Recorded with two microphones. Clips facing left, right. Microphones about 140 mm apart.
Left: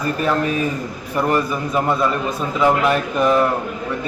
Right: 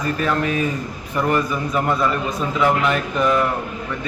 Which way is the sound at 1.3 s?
5° left (ahead or behind).